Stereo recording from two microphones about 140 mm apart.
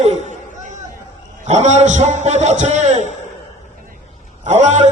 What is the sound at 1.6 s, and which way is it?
A man's voice, 55° right (ahead or behind).